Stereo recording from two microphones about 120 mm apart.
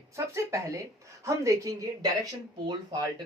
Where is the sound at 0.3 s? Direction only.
25° right (ahead or behind).